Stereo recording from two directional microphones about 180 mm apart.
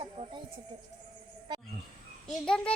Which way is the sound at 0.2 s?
40° right (ahead or behind).